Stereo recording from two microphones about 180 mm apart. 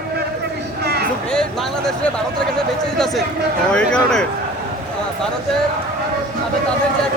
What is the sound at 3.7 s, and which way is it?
Speech, 5° left (ahead or behind).